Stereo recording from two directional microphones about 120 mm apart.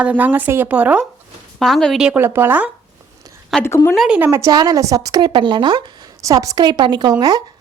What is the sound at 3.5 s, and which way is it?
Speech, centre (ahead or behind).